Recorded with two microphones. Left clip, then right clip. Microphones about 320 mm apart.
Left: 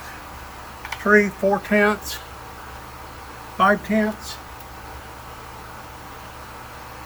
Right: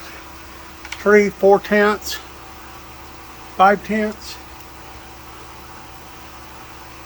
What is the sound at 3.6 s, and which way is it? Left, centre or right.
Speech, centre.